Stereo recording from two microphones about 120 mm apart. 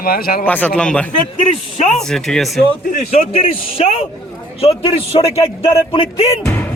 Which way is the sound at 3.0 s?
55° left (ahead or behind).